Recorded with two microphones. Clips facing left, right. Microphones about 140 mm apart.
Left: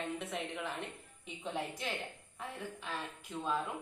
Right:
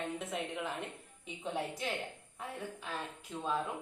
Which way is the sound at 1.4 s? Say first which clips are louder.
Right 2 dB; 20° right (ahead or behind).